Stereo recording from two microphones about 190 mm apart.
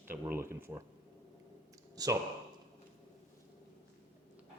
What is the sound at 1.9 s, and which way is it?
Speech, 20° right (ahead or behind).